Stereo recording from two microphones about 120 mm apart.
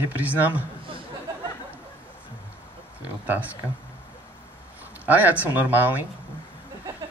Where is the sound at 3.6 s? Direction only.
20° left (ahead or behind).